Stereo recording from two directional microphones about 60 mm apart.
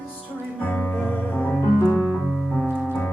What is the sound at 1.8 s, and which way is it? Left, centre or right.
Piano, centre.